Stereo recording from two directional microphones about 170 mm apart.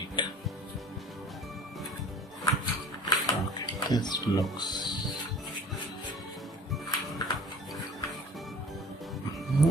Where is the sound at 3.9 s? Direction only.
25° left (ahead or behind).